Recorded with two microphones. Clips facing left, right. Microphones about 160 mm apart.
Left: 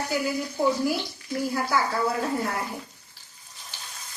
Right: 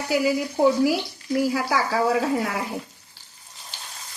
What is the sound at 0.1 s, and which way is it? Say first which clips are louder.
Speech: right 10 dB; 85° right.